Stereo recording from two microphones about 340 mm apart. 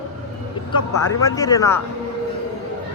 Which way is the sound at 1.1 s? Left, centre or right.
Centre.